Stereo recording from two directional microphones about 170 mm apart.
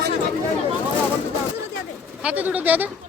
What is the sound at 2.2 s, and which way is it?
Speech, 10° right (ahead or behind).